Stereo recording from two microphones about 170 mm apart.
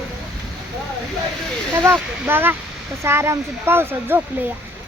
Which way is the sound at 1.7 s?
10° right (ahead or behind).